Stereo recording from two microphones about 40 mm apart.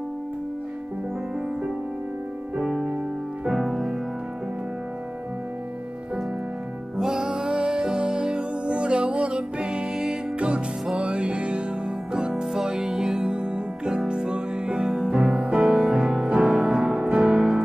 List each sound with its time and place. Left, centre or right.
2.5 s music: centre
7.0 s music: centre
12.3 s music: centre
14.9 s music: centre
15.1 s music: right
16.4 s music: centre
16.7 s music: centre